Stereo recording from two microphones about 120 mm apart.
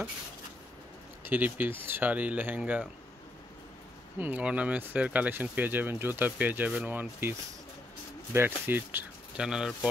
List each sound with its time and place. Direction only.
1.2 s speech: 15° right (ahead or behind)
4.2 s speech: 15° right (ahead or behind)
9.4 s speech: 5° right (ahead or behind)